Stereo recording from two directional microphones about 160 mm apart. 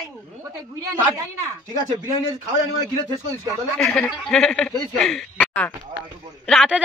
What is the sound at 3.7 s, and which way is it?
A man's voice, centre (ahead or behind).